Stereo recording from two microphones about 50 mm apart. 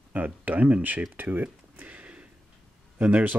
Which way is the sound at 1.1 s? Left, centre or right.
Right.